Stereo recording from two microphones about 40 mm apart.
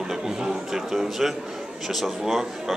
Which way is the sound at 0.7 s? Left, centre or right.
Centre.